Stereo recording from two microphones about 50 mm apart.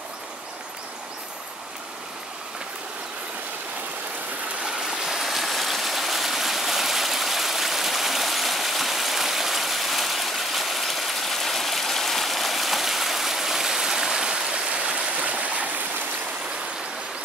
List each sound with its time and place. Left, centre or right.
4.6 s stream: centre; by 15.7 s right